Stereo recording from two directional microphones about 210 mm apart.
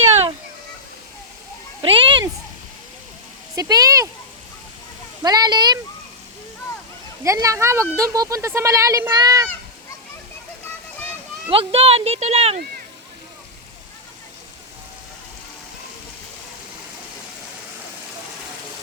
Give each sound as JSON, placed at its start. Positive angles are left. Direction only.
{"t": 1.8, "sound": "a sound", "side_deg": -25}
{"t": 3.5, "sound": "speech", "side_deg": -15}
{"t": 5.2, "sound": "speech", "side_deg": -20}
{"t": 7.3, "sound": "speech", "side_deg": -15}
{"t": 11.5, "sound": "speech", "side_deg": -30}